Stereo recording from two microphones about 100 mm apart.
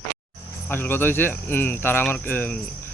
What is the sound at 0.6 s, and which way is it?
Speech, 20° left (ahead or behind).